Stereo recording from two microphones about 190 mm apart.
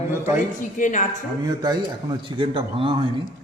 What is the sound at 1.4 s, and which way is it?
A man's voice, 20° right (ahead or behind).